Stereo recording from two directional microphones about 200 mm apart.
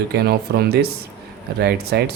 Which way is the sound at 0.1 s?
55° right (ahead or behind).